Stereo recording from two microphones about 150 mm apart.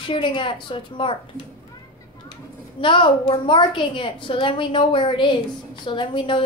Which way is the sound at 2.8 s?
35° left (ahead or behind).